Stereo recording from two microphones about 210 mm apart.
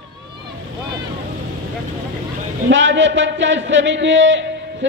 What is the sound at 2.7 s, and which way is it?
A man's voice, 60° right (ahead or behind).